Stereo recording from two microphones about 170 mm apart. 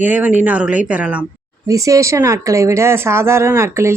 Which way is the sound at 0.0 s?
10° right (ahead or behind).